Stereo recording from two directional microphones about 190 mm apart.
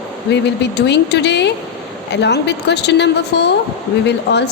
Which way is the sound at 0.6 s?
65° left (ahead or behind).